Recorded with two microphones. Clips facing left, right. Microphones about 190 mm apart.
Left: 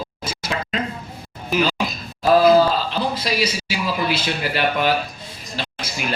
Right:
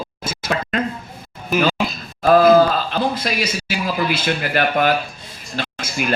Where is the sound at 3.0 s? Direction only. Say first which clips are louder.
Right 1 dB; 50° right (ahead or behind).